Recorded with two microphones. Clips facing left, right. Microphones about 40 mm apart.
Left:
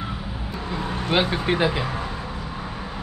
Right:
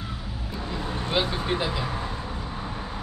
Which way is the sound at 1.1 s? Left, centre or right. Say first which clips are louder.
Left 5 dB; left.